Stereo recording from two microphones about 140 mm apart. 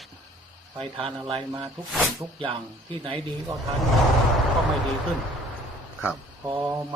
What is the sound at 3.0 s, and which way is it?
Speech, 35° right (ahead or behind).